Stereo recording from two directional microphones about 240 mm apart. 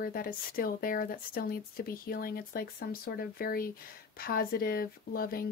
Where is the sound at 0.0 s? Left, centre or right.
Left.